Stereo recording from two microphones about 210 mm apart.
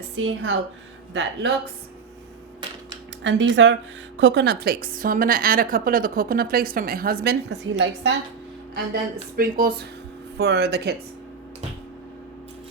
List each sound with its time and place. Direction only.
0.2 s speech: 65° right (ahead or behind)
3.2 s a woman's voice: 60° right (ahead or behind)
9.3 s a woman's voice: 45° right (ahead or behind)